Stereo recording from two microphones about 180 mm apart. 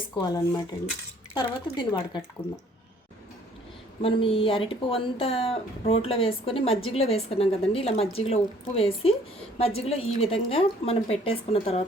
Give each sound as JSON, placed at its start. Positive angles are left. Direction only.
{"t": 0.3, "sound": "speech", "side_deg": 20}
{"t": 4.0, "sound": "a woman's voice", "side_deg": 30}